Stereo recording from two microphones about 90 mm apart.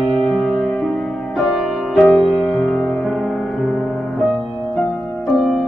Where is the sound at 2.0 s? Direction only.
10° left (ahead or behind).